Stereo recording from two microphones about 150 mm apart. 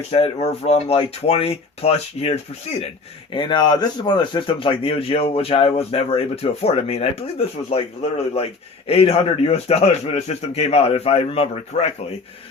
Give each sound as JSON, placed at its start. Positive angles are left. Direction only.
{"t": 0.1, "sound": "a man's voice", "side_deg": 40}
{"t": 3.3, "sound": "a man's voice", "side_deg": 30}